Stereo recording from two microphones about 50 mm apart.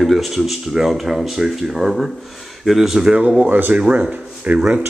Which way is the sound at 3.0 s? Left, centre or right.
Right.